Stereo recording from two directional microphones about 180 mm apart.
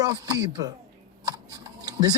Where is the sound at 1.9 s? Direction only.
20° right (ahead or behind).